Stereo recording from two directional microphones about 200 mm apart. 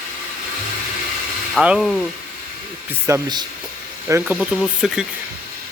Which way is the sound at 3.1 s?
20° right (ahead or behind).